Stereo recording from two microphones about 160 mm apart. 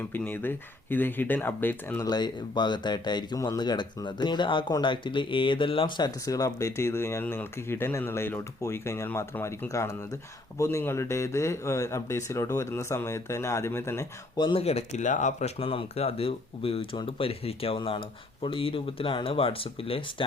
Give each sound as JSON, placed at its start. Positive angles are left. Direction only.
{"t": 0.1, "sound": "speech", "side_deg": 10}
{"t": 2.0, "sound": "speech", "side_deg": 25}
{"t": 6.2, "sound": "speech", "side_deg": 20}